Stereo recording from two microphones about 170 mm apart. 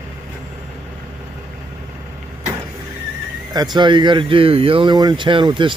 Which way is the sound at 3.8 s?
30° right (ahead or behind).